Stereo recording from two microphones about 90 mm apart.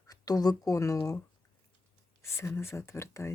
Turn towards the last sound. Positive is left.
turn(degrees=30)  # may be behind; listen again after turning